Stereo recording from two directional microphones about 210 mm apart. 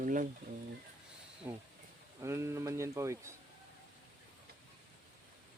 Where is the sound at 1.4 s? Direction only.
10° right (ahead or behind).